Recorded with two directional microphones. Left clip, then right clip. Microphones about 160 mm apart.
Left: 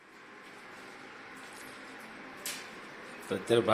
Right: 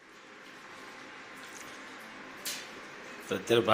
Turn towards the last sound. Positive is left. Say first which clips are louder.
# right 1 dB
turn(degrees=0)  # may be behind; listen again after turning